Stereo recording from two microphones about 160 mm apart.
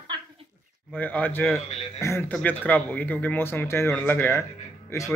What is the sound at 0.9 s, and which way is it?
Speech, 10° left (ahead or behind).